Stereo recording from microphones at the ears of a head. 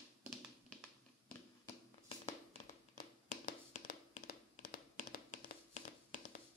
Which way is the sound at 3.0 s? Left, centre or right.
Left.